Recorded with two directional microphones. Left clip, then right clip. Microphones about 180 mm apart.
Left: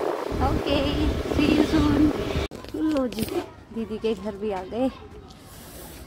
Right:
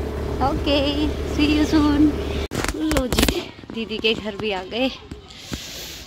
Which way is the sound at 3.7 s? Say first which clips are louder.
Right 5 dB; 10° right (ahead or behind).